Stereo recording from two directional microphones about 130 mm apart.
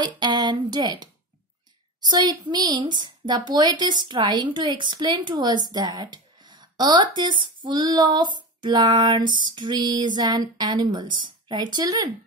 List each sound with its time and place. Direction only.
0.0 s female singing: 35° right (ahead or behind)